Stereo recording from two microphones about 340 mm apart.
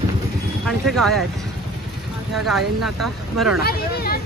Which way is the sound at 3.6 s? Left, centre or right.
Left.